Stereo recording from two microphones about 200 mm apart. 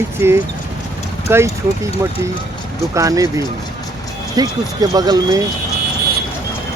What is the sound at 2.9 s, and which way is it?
Speech, 15° right (ahead or behind).